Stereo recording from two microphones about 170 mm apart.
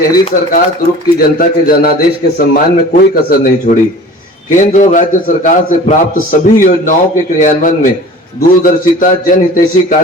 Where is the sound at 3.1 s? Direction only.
55° left (ahead or behind).